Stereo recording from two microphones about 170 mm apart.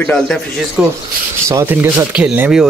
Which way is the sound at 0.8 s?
10° right (ahead or behind).